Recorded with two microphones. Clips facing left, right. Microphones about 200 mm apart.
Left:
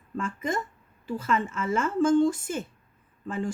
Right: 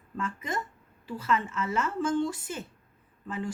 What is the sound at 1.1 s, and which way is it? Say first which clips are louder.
Speech: left 2 dB; 50° left (ahead or behind).